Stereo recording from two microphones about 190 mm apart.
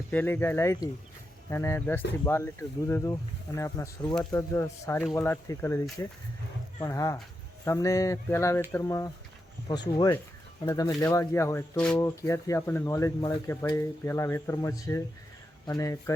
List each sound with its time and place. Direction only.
0.1 s speech: 10° left (ahead or behind)
10.6 s speech: 20° left (ahead or behind)